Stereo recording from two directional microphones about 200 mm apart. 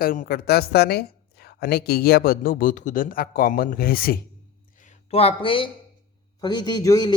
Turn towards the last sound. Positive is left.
turn(degrees=20)  # may be behind; listen again after turning